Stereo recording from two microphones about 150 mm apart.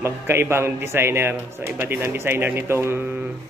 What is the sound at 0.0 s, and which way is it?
A man's voice, 15° right (ahead or behind).